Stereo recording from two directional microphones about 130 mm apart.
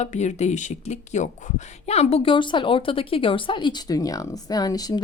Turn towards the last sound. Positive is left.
turn(degrees=30)  # may be behind; listen again after turning